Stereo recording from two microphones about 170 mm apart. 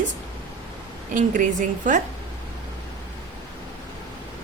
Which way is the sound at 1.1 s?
50° right (ahead or behind).